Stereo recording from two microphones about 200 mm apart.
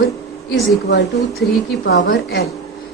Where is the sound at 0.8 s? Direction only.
55° left (ahead or behind).